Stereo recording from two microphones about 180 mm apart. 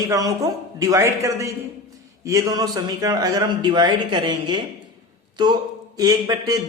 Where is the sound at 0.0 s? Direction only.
20° right (ahead or behind).